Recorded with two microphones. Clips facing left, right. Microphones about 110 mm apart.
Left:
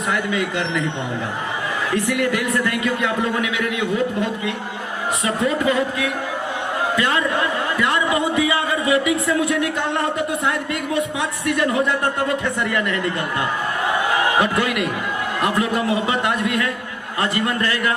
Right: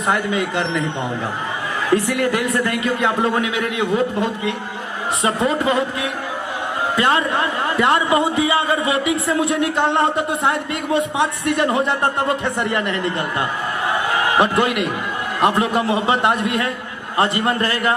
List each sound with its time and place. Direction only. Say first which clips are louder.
0.1 s a man's voice: right 3 dB; 35° right (ahead or behind)
2.0 s a man's voice: right 1 dB; 35° right (ahead or behind)
14.3 s a man's voice: right 2 dB; 30° right (ahead or behind)